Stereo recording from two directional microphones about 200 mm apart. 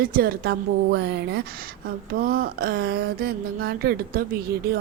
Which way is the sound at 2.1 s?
45° right (ahead or behind).